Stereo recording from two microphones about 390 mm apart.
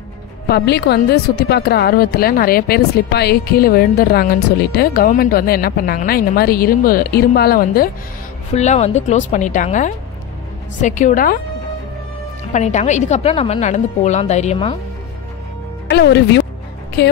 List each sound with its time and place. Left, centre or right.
0.5 s a woman's voice: left
12.5 s a woman's voice: centre
15.9 s speech: left